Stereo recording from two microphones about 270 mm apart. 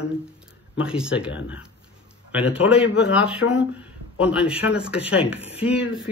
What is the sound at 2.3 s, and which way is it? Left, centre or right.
Speech, centre.